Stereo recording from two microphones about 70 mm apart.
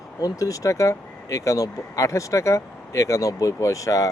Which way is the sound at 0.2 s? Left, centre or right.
Left.